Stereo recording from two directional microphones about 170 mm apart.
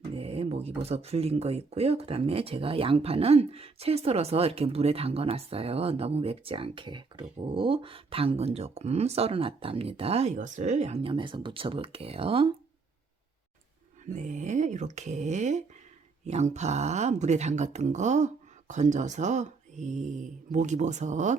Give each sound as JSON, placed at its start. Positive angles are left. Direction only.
{"t": 0.1, "sound": "a sound", "side_deg": -35}
{"t": 0.8, "sound": "speech", "side_deg": -40}
{"t": 14.1, "sound": "speech", "side_deg": -45}